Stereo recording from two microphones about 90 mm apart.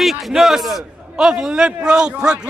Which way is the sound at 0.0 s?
Centre (ahead or behind).